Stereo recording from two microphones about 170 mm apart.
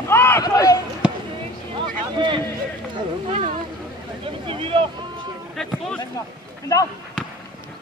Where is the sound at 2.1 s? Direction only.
30° right (ahead or behind).